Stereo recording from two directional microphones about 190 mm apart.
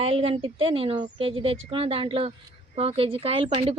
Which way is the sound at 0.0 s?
30° right (ahead or behind).